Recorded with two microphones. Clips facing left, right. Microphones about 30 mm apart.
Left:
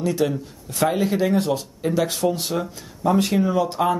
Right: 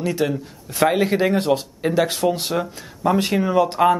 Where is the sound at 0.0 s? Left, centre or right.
Right.